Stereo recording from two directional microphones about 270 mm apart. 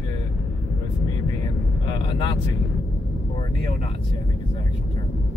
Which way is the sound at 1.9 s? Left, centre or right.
Centre.